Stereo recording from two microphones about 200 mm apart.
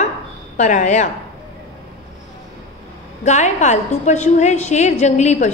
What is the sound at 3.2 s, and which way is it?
A woman's voice, 35° left (ahead or behind).